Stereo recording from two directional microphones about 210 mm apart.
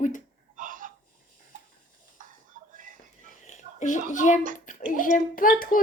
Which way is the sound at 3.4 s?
35° left (ahead or behind).